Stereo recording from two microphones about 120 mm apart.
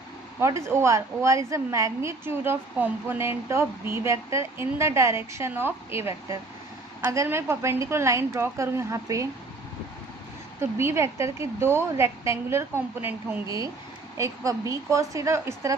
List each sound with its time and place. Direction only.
0.3 s a woman's voice: 25° right (ahead or behind)
10.6 s a woman's voice: 20° right (ahead or behind)
14.2 s a woman's voice: 25° right (ahead or behind)